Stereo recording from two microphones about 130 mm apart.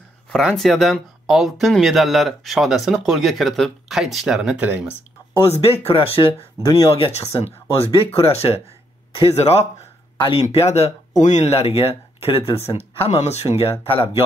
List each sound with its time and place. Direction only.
0.3 s speech: 5° left (ahead or behind)
5.6 s speech: 50° left (ahead or behind)
6.7 s speech: 20° left (ahead or behind)
7.0 s speech: 50° left (ahead or behind)
10.1 s speech: 40° left (ahead or behind)
10.4 s speech: 55° left (ahead or behind)